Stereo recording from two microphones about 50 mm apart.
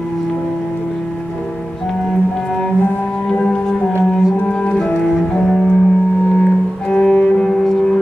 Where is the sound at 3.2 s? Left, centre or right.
Left.